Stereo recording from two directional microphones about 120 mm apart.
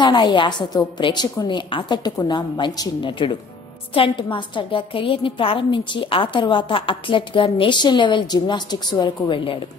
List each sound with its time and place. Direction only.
0.0 s a woman's voice: 40° left (ahead or behind)